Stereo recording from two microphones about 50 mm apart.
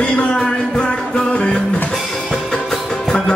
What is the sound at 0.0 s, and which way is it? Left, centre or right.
Music, left.